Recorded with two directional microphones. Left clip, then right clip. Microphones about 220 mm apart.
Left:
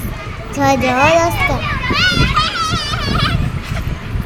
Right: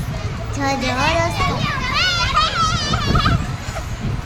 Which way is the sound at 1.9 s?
55° left (ahead or behind).